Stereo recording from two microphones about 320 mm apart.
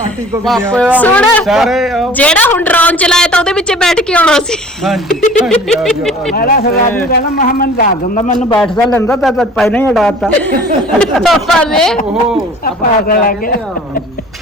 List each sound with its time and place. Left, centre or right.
0.4 s a man's voice: centre
6.3 s a man's voice: left
8.4 s a man's voice: centre
12.6 s a man's voice: left